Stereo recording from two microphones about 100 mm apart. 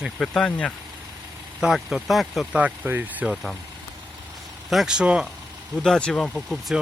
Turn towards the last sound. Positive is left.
turn(degrees=10)  # may be behind; listen again after turning